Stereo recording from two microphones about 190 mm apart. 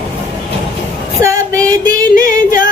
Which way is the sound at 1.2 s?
15° right (ahead or behind).